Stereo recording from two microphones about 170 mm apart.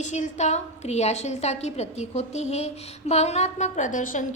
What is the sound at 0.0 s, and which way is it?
A woman's voice, 45° left (ahead or behind).